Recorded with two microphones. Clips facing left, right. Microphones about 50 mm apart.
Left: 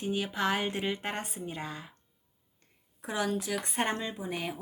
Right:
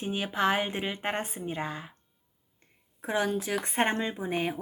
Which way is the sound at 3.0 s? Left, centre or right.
Right.